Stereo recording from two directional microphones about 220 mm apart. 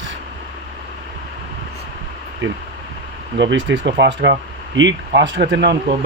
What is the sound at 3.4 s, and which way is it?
Speech, 55° right (ahead or behind).